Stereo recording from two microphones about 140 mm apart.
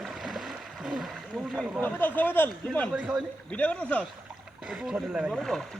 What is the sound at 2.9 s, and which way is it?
Speech, 5° right (ahead or behind).